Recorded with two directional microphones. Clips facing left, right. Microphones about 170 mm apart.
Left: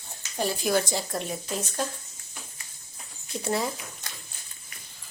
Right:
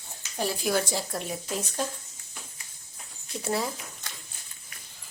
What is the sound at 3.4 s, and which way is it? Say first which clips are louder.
Speech: left 1 dB; 5° right (ahead or behind).